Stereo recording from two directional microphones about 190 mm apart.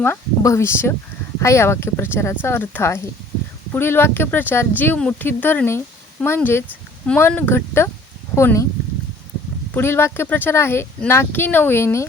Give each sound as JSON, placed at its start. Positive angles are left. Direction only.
{"t": 0.0, "sound": "speech", "side_deg": 15}
{"t": 9.7, "sound": "speech", "side_deg": 10}